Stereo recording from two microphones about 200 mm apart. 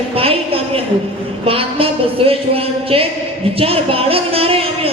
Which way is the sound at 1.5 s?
30° right (ahead or behind).